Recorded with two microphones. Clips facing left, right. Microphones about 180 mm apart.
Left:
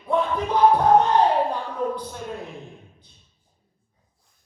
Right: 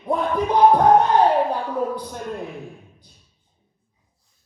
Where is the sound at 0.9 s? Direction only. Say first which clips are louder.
Right 2 dB; 10° right (ahead or behind).